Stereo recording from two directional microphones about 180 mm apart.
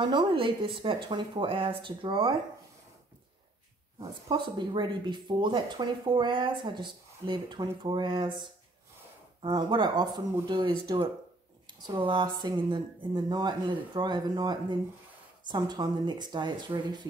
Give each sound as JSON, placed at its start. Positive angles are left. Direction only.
{"t": 0.0, "sound": "speech", "side_deg": -25}
{"t": 4.3, "sound": "speech", "side_deg": -25}